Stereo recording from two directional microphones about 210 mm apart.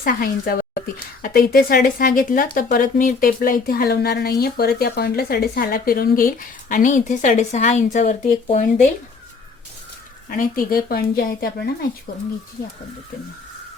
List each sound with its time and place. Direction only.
0.0 s speech: 45° left (ahead or behind)
10.2 s speech: 40° left (ahead or behind)